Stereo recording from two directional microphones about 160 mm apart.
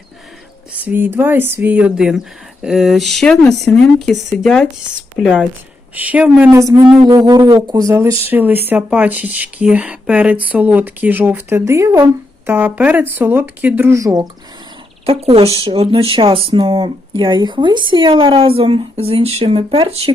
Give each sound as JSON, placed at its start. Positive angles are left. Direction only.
{"t": 0.9, "sound": "speech", "side_deg": -10}
{"t": 15.0, "sound": "speech", "side_deg": -35}